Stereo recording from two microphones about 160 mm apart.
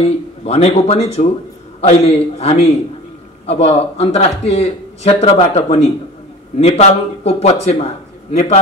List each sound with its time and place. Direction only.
0.0 s speech: 40° left (ahead or behind)